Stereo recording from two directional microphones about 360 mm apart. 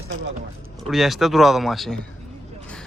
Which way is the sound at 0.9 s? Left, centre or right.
Centre.